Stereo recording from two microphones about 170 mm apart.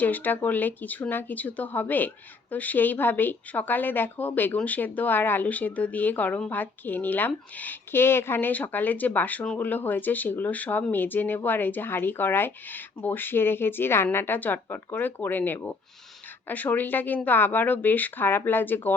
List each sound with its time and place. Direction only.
0.0 s speech: 10° left (ahead or behind)